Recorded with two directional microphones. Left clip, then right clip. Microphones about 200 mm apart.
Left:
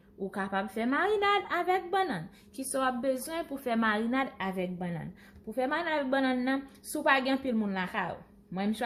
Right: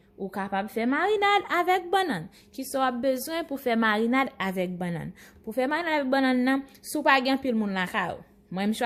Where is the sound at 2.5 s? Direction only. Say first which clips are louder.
Right 4 dB; 30° right (ahead or behind).